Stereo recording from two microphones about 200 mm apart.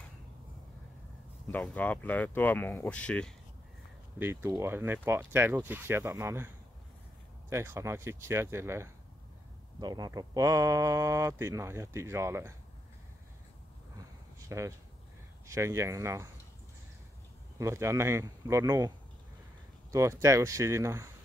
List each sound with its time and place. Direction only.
1.5 s speech: 5° left (ahead or behind)
4.2 s speech: 10° right (ahead or behind)
14.5 s speech: 15° right (ahead or behind)
17.6 s speech: 15° right (ahead or behind)